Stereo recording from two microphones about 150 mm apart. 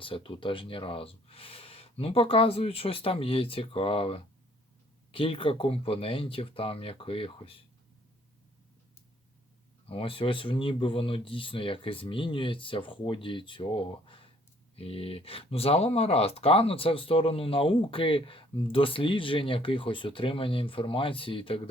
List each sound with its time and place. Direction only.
0.0 s speech: 35° left (ahead or behind)
9.9 s speech: 35° left (ahead or behind)